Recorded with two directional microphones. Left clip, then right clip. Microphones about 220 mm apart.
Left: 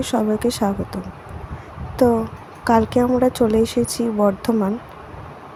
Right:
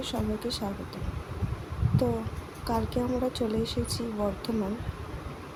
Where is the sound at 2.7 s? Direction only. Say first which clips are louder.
Left 14 dB; 35° left (ahead or behind).